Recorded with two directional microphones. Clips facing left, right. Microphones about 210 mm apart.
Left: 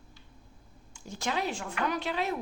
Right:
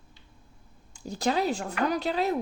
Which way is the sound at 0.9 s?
35° right (ahead or behind).